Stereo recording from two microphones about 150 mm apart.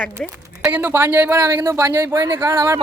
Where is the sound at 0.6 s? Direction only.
10° right (ahead or behind).